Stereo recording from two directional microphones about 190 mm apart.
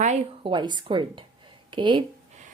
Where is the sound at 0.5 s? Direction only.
25° right (ahead or behind).